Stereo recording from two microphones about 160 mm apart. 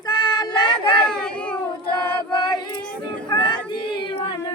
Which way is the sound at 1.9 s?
25° left (ahead or behind).